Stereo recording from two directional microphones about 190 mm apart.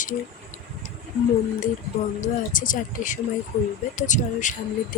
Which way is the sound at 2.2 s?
45° left (ahead or behind).